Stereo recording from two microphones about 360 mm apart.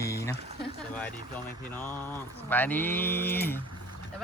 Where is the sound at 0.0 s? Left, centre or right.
Centre.